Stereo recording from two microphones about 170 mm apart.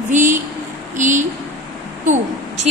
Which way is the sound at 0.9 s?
45° right (ahead or behind).